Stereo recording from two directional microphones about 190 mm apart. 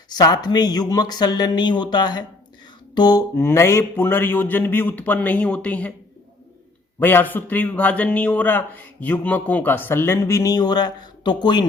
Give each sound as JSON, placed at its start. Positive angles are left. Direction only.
{"t": 0.1, "sound": "a man's voice", "side_deg": 20}
{"t": 7.0, "sound": "a man's voice", "side_deg": 10}